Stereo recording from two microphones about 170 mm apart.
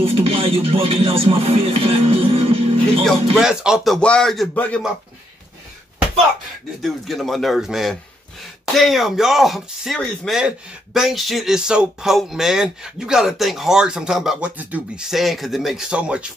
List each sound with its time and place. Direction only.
0.0 s speech: 35° right (ahead or behind)
3.1 s speech: 5° right (ahead or behind)
6.8 s speech: centre (ahead or behind)